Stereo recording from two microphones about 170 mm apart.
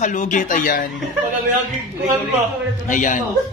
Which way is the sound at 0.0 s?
45° left (ahead or behind).